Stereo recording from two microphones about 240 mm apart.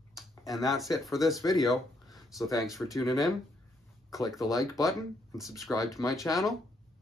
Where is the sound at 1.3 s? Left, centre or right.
Centre.